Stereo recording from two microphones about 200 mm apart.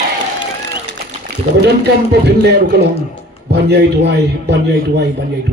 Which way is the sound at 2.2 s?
55° right (ahead or behind).